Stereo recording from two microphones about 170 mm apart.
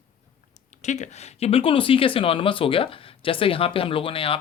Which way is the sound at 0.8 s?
45° left (ahead or behind).